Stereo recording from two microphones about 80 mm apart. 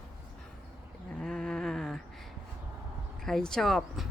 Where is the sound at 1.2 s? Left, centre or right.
Centre.